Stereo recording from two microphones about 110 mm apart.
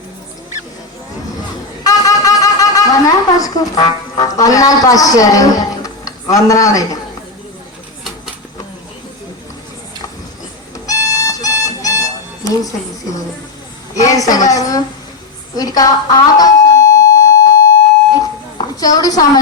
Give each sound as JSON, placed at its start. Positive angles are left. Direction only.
{"t": 1.8, "sound": "a woman's voice", "side_deg": 30}
{"t": 10.8, "sound": "music", "side_deg": 30}
{"t": 13.9, "sound": "a woman's voice", "side_deg": 30}
{"t": 15.5, "sound": "a sound", "side_deg": 35}
{"t": 18.8, "sound": "a woman's voice", "side_deg": 35}